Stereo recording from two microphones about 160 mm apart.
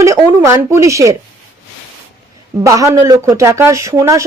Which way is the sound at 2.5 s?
20° right (ahead or behind).